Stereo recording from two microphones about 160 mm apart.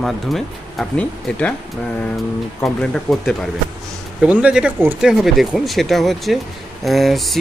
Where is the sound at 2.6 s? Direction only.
5° left (ahead or behind).